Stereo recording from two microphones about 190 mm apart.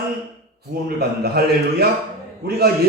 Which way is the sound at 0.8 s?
55° right (ahead or behind).